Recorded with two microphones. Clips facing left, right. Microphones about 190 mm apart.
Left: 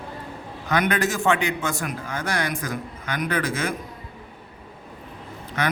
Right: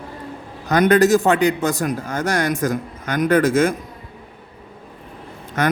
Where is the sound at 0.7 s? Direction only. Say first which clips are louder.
Right 9 dB; 40° right (ahead or behind).